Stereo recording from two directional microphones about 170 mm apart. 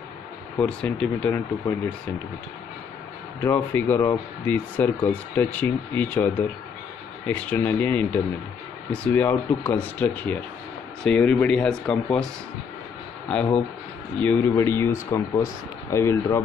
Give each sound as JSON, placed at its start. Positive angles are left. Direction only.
{"t": 0.6, "sound": "speech", "side_deg": 5}
{"t": 3.4, "sound": "speech", "side_deg": 10}
{"t": 13.3, "sound": "speech", "side_deg": 5}